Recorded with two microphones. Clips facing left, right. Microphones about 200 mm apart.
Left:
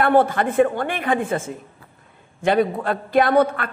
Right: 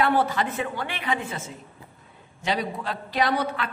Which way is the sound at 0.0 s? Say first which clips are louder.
Left 6 dB; 50° left (ahead or behind).